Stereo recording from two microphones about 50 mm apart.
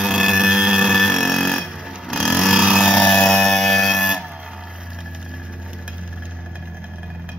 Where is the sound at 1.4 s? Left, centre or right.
Centre.